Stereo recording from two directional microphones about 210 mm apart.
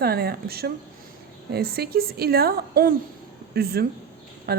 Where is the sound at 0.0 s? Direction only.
45° right (ahead or behind).